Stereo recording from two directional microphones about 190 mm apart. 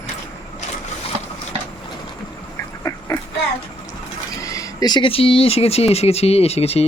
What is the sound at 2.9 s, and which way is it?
Duck, 15° left (ahead or behind).